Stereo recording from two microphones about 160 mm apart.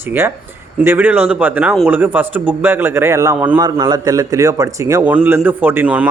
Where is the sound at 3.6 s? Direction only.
25° right (ahead or behind).